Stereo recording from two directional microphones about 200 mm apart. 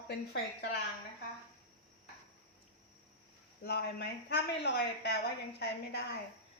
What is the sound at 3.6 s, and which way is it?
Speech, 50° left (ahead or behind).